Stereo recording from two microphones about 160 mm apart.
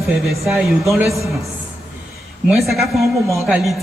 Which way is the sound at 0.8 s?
20° right (ahead or behind).